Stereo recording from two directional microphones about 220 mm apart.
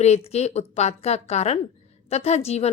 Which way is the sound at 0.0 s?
30° left (ahead or behind).